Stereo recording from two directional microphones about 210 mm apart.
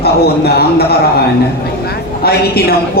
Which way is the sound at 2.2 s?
50° left (ahead or behind).